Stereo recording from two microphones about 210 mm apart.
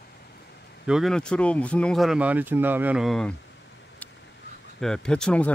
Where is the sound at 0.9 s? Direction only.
Centre (ahead or behind).